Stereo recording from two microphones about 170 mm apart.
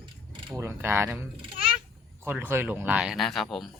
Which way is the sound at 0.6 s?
15° right (ahead or behind).